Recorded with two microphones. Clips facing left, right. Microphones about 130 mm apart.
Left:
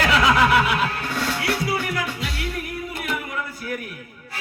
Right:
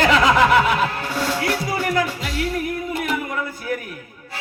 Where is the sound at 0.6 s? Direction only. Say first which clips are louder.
Right 3 dB; 35° right (ahead or behind).